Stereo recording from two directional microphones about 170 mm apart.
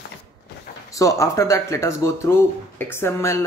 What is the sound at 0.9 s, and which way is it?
Speech, 20° left (ahead or behind).